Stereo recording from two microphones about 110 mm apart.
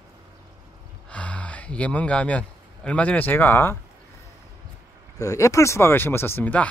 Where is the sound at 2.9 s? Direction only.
10° left (ahead or behind).